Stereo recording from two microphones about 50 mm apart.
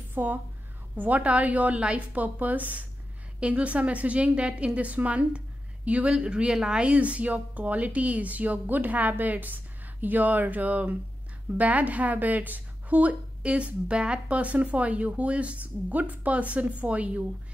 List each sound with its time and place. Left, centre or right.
0.1 s a woman's voice: right